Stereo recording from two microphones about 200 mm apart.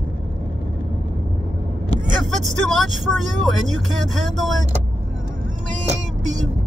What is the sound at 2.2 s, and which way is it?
Speech, centre (ahead or behind).